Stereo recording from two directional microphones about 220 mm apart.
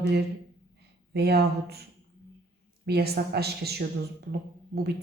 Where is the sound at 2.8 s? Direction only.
45° right (ahead or behind).